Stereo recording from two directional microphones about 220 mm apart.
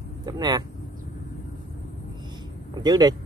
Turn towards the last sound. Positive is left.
turn(degrees=-20)  # may be behind; listen again after turning